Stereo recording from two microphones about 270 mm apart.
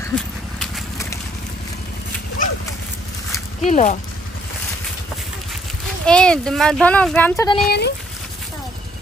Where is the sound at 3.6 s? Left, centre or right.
Left.